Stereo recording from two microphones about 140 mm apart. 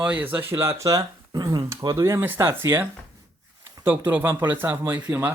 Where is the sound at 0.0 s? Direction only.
10° right (ahead or behind).